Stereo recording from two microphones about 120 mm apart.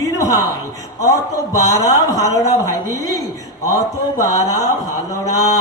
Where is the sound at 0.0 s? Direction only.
30° left (ahead or behind).